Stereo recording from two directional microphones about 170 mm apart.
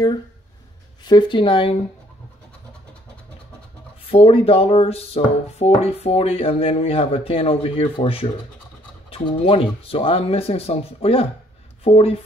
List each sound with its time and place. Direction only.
1.0 s speech: 25° left (ahead or behind)
4.0 s speech: 35° left (ahead or behind)